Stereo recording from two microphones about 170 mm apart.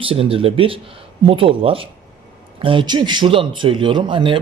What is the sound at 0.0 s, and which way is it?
A man's voice, 35° right (ahead or behind).